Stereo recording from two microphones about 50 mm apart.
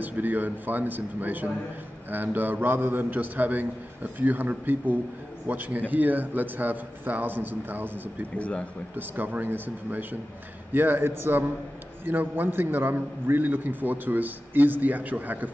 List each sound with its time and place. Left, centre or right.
0.0 s a man's voice: right
8.4 s speech: left
8.9 s a man's voice: right